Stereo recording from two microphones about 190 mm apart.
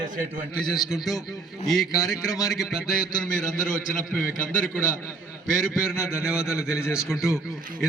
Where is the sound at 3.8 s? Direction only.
45° left (ahead or behind).